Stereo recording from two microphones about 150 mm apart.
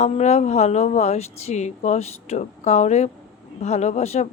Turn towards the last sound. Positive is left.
turn(degrees=45)  # may be behind; listen again after turning